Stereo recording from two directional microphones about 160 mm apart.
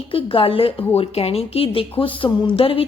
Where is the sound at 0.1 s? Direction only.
35° left (ahead or behind).